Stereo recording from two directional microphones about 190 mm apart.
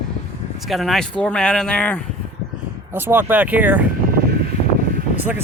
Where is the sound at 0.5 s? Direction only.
Centre (ahead or behind).